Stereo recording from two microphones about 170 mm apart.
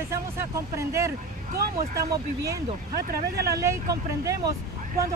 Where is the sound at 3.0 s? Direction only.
65° right (ahead or behind).